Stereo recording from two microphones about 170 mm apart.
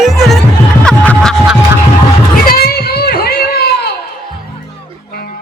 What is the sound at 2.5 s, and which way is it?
Music, 65° left (ahead or behind).